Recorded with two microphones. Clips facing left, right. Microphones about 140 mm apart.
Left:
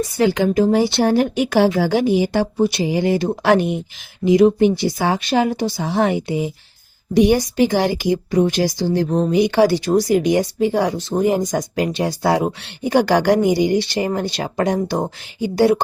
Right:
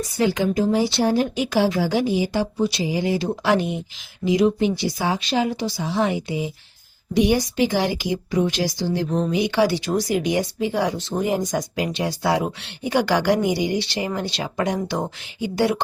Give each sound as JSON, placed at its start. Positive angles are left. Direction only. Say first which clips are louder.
{"t": 0.2, "sound": "speech", "louder": "left 4 dB", "side_deg": 65}